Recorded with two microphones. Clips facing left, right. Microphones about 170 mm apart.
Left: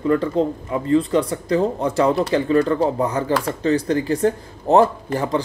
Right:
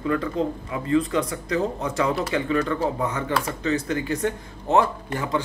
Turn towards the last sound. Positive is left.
turn(degrees=35)  # may be behind; listen again after turning